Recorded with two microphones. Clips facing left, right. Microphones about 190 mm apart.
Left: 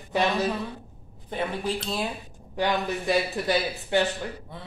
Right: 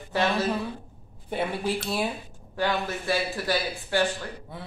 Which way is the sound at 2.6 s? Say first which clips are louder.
Left 1 dB; 15° left (ahead or behind).